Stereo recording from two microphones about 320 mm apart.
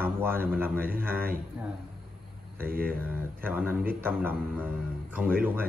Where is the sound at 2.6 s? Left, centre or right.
Right.